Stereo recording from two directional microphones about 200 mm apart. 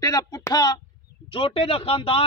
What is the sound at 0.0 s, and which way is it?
Speech, 20° left (ahead or behind).